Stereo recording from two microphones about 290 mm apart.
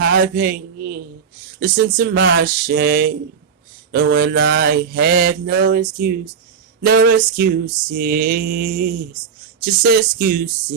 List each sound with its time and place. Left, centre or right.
0.0 s a man's voice: right
1.5 s mantra: right
9.6 s speech: right